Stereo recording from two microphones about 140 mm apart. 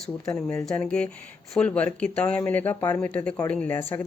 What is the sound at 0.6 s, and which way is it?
Speech, 5° left (ahead or behind).